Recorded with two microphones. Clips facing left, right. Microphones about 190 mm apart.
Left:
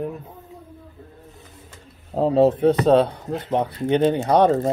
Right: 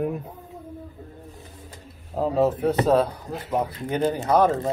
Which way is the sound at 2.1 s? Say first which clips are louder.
Left 5 dB; 30° left (ahead or behind).